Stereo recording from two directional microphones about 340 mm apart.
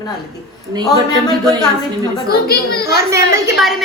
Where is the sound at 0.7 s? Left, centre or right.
Centre.